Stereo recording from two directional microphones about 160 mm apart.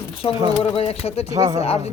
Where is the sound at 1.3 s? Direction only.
20° right (ahead or behind).